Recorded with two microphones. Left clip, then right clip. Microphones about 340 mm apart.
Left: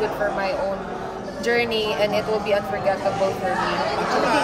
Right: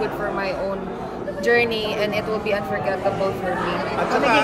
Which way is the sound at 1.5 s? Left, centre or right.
Centre.